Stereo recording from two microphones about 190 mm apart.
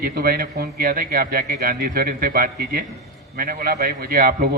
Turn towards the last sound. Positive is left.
turn(degrees=-55)  # may be behind; listen again after turning